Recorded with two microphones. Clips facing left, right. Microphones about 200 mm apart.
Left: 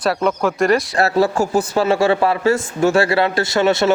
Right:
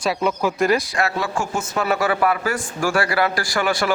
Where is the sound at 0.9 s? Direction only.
35° left (ahead or behind).